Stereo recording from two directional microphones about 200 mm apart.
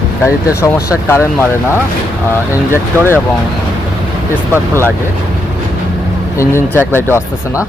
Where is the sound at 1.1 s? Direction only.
10° left (ahead or behind).